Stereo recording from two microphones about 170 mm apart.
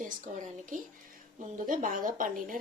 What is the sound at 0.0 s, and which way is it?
A woman's voice, 50° right (ahead or behind).